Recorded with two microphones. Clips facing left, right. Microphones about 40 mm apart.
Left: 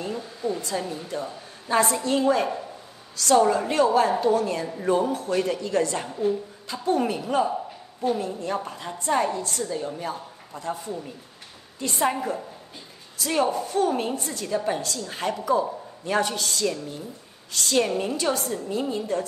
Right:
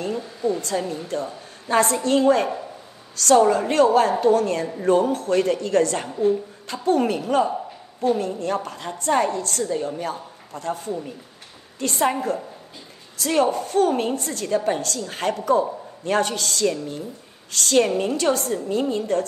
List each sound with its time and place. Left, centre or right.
0.1 s speech: centre
1.1 s a woman's voice: right
2.4 s speech: centre
3.2 s a woman's voice: right
13.2 s a woman's voice: right